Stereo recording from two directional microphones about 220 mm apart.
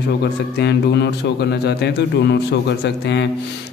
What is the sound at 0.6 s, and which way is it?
Speech, 50° left (ahead or behind).